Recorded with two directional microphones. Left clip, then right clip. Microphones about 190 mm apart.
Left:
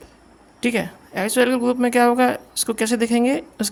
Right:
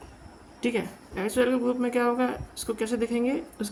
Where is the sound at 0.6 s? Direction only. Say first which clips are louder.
Left 6 dB; 55° left (ahead or behind).